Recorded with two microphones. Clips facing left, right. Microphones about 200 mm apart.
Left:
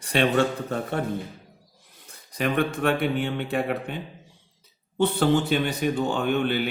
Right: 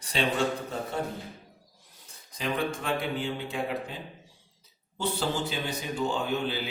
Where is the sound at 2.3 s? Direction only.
65° left (ahead or behind).